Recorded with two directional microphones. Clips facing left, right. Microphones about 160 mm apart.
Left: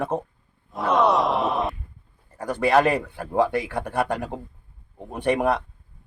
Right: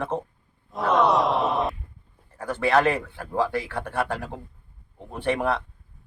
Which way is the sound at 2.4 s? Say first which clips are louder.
Left 2 dB; 15° left (ahead or behind).